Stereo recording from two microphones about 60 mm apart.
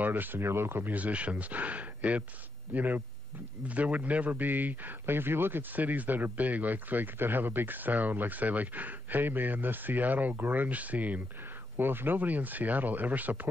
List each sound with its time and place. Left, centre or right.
0.0 s a man's voice: right
0.9 s a man's voice: right